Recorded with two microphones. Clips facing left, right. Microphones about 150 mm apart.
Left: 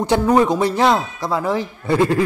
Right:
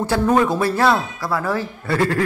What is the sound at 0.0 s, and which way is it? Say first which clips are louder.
A man's voice: left 2 dB; 20° left (ahead or behind).